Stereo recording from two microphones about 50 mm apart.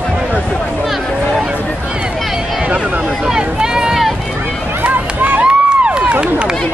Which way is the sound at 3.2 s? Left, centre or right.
Centre.